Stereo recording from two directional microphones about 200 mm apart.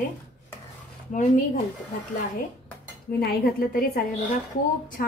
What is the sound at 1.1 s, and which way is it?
Speech, 40° left (ahead or behind).